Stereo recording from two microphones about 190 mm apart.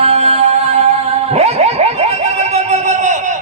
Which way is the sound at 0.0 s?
35° right (ahead or behind).